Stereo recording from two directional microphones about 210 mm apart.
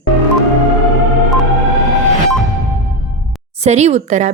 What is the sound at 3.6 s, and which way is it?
Speech, 30° right (ahead or behind).